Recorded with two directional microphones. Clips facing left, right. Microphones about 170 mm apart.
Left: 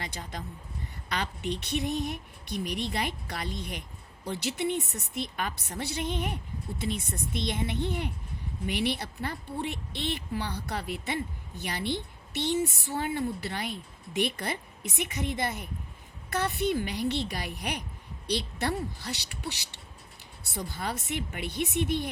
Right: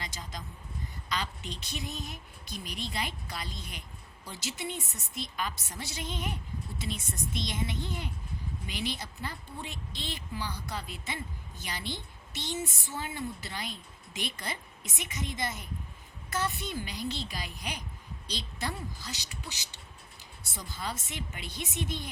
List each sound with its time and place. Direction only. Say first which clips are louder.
0.0 s a woman's voice: left 4 dB; 60° left (ahead or behind)